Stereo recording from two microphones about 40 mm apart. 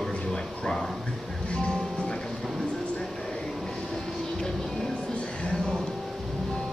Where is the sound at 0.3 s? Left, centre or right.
Centre.